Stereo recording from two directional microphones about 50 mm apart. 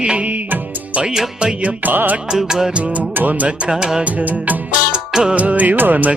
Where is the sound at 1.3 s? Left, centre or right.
Centre.